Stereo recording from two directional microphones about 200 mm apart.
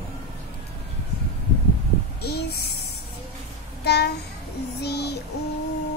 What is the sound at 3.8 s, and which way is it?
Child singing, 55° left (ahead or behind).